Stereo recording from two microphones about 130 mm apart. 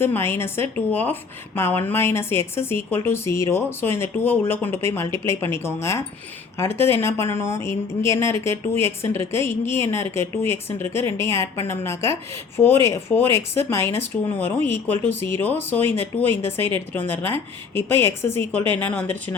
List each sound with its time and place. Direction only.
0.0 s a woman's voice: 20° left (ahead or behind)
17.7 s speech: 20° left (ahead or behind)